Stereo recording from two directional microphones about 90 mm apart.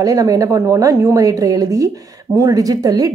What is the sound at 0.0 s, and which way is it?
A woman's voice, 40° right (ahead or behind).